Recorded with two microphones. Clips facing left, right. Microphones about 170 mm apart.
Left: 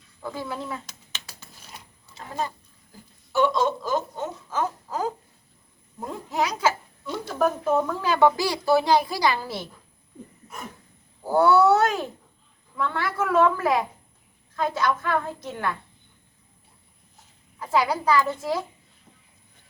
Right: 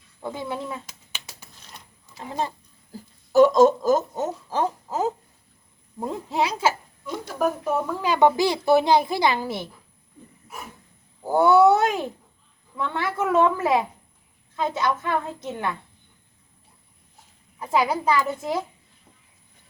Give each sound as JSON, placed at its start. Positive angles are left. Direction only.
{"t": 0.2, "sound": "speech", "side_deg": -20}
{"t": 2.0, "sound": "speech", "side_deg": -20}
{"t": 2.9, "sound": "speech", "side_deg": -40}
{"t": 6.3, "sound": "speech", "side_deg": -30}
{"t": 7.0, "sound": "speech", "side_deg": -10}
{"t": 11.3, "sound": "a child's voice", "side_deg": -20}
{"t": 17.6, "sound": "speech", "side_deg": -20}